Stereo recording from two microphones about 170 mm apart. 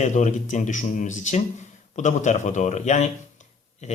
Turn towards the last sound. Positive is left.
turn(degrees=40)  # may be behind; listen again after turning